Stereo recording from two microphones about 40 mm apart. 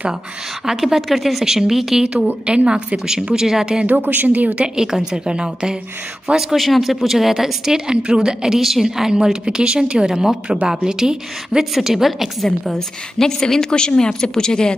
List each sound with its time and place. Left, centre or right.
0.7 s a woman's voice: centre
2.2 s a woman's voice: right
3.3 s a woman's voice: centre
3.8 s a woman's voice: right
4.7 s a woman's voice: centre
6.5 s a woman's voice: centre
12.7 s a woman's voice: centre